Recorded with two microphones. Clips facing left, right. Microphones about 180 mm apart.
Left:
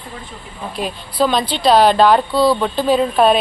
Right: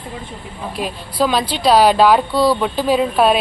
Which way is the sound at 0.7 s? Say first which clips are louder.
Left 1 dB; 5° right (ahead or behind).